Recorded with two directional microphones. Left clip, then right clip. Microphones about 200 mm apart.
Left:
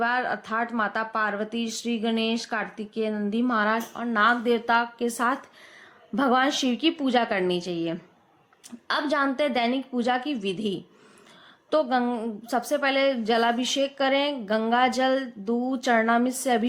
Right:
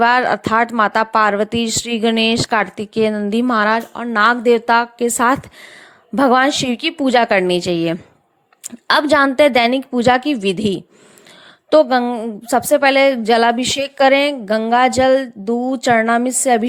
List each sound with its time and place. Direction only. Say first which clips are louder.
0.0 s a woman's voice: right 12 dB; 45° right (ahead or behind)